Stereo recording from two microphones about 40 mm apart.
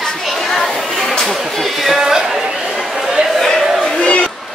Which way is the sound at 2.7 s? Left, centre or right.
Centre.